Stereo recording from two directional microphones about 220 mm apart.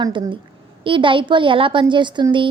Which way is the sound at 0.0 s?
20° right (ahead or behind).